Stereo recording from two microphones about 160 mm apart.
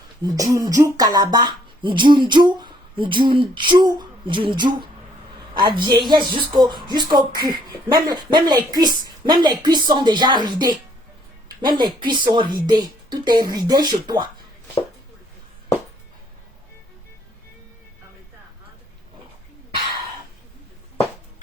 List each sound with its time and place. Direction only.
0.3 s speech: 20° right (ahead or behind)